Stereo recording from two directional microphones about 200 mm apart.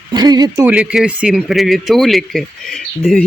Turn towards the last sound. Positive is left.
turn(degrees=5)  # may be behind; listen again after turning